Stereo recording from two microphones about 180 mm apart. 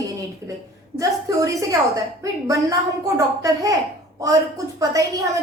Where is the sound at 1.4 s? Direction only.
20° right (ahead or behind).